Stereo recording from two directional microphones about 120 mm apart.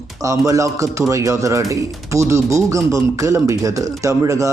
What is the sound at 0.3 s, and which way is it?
Speech, 25° right (ahead or behind).